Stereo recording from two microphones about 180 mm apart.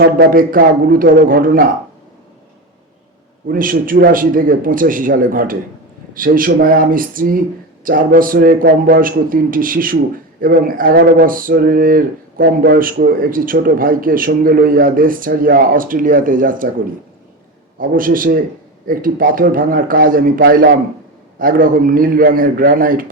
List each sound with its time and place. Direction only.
0.0 s speech: 60° right (ahead or behind)
3.4 s speech: 50° right (ahead or behind)
17.7 s speech: 50° right (ahead or behind)